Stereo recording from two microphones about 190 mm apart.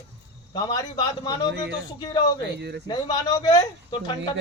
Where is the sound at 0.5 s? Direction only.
20° left (ahead or behind).